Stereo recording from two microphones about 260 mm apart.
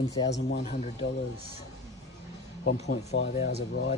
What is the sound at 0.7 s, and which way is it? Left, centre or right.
Speech, left.